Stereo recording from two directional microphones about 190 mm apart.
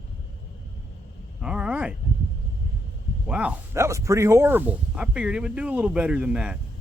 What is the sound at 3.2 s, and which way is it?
Speech, 5° right (ahead or behind).